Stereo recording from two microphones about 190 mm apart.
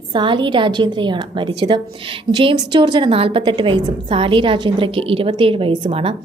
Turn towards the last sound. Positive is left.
turn(degrees=-30)  # may be behind; listen again after turning